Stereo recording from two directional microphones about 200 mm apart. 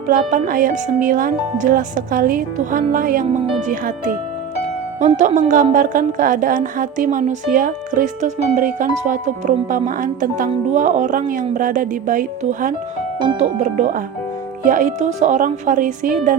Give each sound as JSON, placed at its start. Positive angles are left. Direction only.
{"t": 0.1, "sound": "speech", "side_deg": -40}